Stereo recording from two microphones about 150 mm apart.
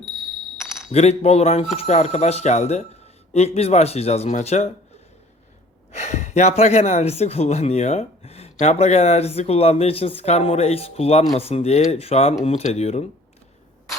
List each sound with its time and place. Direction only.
0.9 s speech: 45° left (ahead or behind)
6.0 s speech: 50° left (ahead or behind)